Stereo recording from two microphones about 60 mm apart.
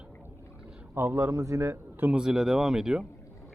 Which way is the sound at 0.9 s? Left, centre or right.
Right.